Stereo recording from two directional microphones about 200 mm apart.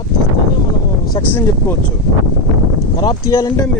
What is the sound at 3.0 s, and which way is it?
Speech, 20° left (ahead or behind).